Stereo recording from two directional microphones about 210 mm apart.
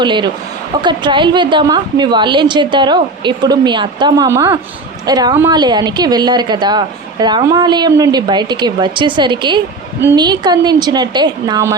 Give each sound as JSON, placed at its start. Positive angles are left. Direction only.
{"t": 0.0, "sound": "a woman's voice", "side_deg": -20}